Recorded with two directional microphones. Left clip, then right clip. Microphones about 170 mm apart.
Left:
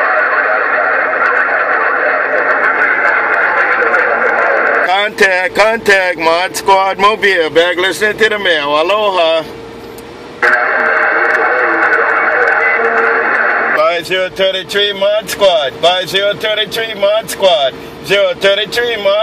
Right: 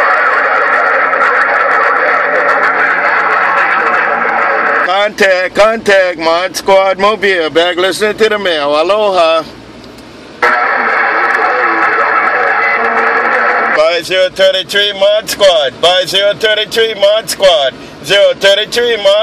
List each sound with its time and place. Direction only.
0.0 s neigh: 50° right (ahead or behind)
4.8 s speech: 10° right (ahead or behind)
10.4 s radio: 50° right (ahead or behind); by 16.9 s 30° right (ahead or behind)
17.4 s speech: 30° right (ahead or behind)